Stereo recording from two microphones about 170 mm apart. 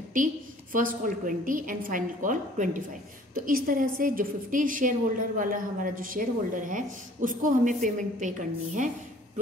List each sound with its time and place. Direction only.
0.2 s a woman's voice: 50° right (ahead or behind)